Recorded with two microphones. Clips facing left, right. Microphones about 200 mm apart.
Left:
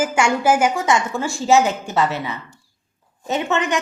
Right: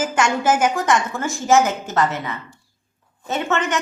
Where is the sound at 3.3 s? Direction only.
15° left (ahead or behind).